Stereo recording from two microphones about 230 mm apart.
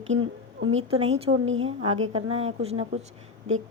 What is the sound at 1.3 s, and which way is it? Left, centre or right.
Speech, right.